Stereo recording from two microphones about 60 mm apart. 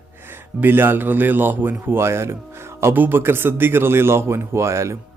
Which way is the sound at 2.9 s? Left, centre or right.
Right.